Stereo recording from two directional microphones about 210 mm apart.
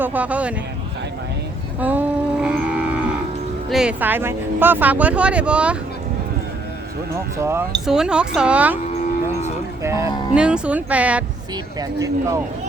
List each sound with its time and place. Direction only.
0.0 s speech: 5° right (ahead or behind)
1.8 s music: 10° right (ahead or behind)
3.7 s speech: 5° right (ahead or behind)
7.3 s speech: 10° right (ahead or behind)
9.8 s music: 15° right (ahead or behind)
10.3 s speech: 5° right (ahead or behind)
11.5 s speech: 15° right (ahead or behind)